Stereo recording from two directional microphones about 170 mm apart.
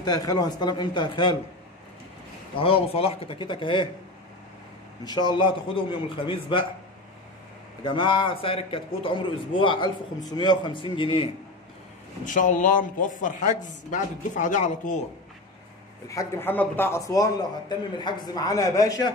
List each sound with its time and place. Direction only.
0.0 s a man's voice: 25° left (ahead or behind)
2.5 s speech: 35° left (ahead or behind)
5.0 s a man's voice: 25° left (ahead or behind)
7.8 s a man's voice: 30° left (ahead or behind)
12.3 s speech: 50° left (ahead or behind)
16.1 s a man's voice: 15° left (ahead or behind)